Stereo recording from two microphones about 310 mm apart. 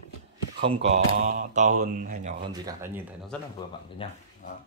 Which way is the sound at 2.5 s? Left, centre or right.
Centre.